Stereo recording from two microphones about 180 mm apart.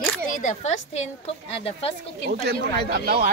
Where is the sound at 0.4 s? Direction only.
40° left (ahead or behind).